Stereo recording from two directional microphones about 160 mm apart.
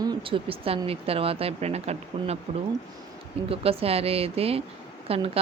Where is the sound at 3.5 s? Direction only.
35° right (ahead or behind).